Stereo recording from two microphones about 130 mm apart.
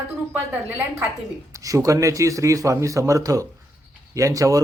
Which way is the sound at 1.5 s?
25° right (ahead or behind).